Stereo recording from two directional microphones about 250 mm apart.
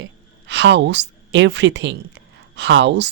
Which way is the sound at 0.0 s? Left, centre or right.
Right.